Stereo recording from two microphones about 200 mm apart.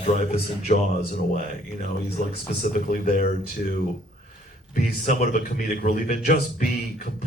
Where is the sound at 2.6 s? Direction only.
40° left (ahead or behind).